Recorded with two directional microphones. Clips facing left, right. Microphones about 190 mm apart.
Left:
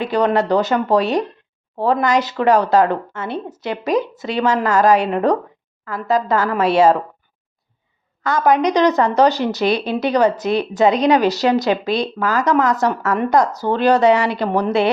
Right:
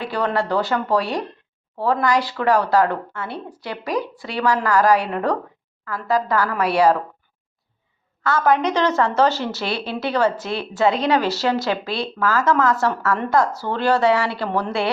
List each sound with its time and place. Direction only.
0.0 s speech: 20° left (ahead or behind)
8.2 s a woman's voice: 15° left (ahead or behind)